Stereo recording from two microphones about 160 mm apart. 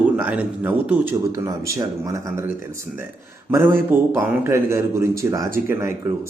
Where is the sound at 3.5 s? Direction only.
15° right (ahead or behind).